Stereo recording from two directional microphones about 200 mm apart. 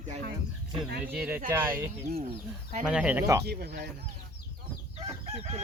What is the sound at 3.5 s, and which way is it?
Speech, 55° right (ahead or behind).